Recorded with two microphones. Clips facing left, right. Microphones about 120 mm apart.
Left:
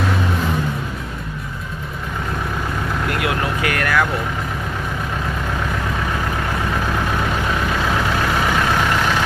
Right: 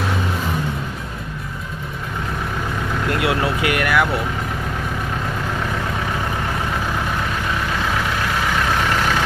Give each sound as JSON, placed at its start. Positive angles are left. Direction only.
{"t": 3.1, "sound": "vehicle", "side_deg": -25}